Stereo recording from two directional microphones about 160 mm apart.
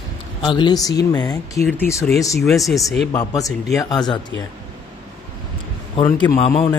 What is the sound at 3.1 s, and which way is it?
Speech, 20° left (ahead or behind).